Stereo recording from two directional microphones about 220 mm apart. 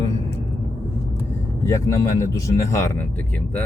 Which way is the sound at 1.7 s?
15° left (ahead or behind).